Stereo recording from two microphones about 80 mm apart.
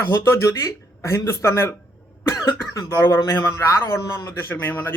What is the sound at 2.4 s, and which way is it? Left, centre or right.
Speech, left.